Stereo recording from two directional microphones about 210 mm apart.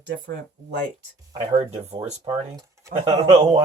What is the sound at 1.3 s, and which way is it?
Speech, 25° right (ahead or behind).